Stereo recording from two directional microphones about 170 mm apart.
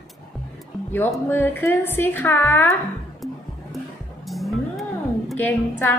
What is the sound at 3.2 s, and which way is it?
Music, centre (ahead or behind).